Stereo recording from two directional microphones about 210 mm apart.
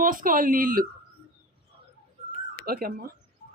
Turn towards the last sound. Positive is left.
turn(degrees=-45)  # may be behind; listen again after turning